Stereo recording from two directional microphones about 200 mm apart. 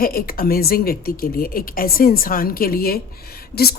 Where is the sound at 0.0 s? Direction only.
50° left (ahead or behind).